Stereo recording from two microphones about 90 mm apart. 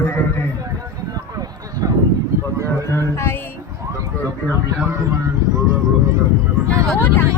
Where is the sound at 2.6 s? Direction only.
30° left (ahead or behind).